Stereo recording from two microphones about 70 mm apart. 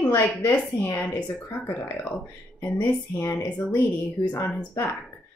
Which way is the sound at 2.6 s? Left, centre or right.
Left.